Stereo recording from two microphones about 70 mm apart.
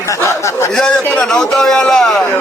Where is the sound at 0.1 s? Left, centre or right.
Left.